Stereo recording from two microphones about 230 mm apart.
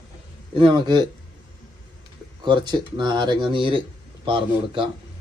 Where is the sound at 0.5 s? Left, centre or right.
Right.